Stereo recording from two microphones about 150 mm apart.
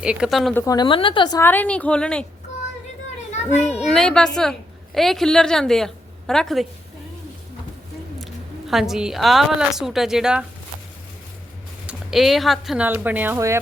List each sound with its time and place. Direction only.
0.0 s a woman's voice: 5° right (ahead or behind)
0.5 s a woman's voice: 20° left (ahead or behind)
1.4 s a woman's voice: 10° left (ahead or behind)
3.8 s a child's voice: 5° left (ahead or behind)
8.2 s a woman's voice: centre (ahead or behind)
11.9 s speech: centre (ahead or behind); by 13.6 s 20° right (ahead or behind)